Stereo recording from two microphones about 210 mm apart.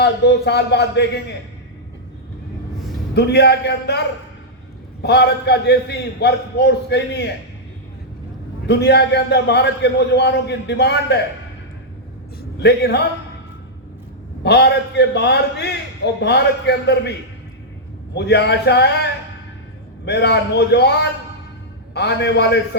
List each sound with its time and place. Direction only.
0.0 s a man's voice: 55° left (ahead or behind)
3.2 s a man's voice: 55° left (ahead or behind)
5.0 s a man's voice: 50° left (ahead or behind)
8.6 s a man's voice: 50° left (ahead or behind)
12.4 s a man's voice: 50° left (ahead or behind)
14.4 s a man's voice: 50° left (ahead or behind)
20.1 s a man's voice: 55° left (ahead or behind)